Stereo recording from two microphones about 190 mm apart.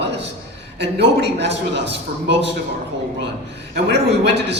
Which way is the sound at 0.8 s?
65° right (ahead or behind).